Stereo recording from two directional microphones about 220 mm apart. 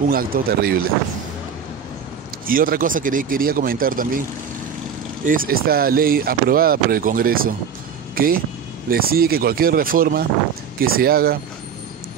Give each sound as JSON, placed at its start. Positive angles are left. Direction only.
{"t": 0.1, "sound": "speech", "side_deg": -40}
{"t": 2.4, "sound": "speech", "side_deg": -40}
{"t": 5.2, "sound": "speech", "side_deg": -40}
{"t": 8.1, "sound": "vehicle", "side_deg": -40}
{"t": 8.8, "sound": "speech", "side_deg": -40}